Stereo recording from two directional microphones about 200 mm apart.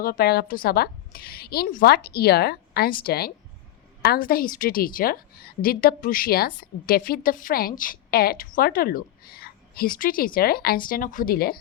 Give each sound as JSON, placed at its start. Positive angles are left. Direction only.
{"t": 0.0, "sound": "a woman's voice", "side_deg": 50}